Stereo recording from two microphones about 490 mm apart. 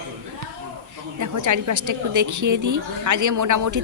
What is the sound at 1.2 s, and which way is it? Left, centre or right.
A woman's voice, right.